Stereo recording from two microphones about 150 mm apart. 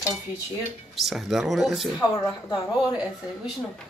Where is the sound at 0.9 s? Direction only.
Centre (ahead or behind).